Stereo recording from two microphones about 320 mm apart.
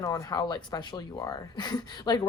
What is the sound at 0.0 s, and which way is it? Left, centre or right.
Speech, centre.